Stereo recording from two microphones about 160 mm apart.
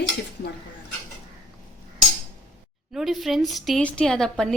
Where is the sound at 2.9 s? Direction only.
Centre (ahead or behind).